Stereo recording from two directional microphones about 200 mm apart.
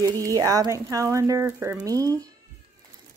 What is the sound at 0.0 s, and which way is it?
Speech, 15° right (ahead or behind).